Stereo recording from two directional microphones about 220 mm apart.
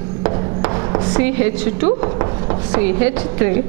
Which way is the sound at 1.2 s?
10° right (ahead or behind).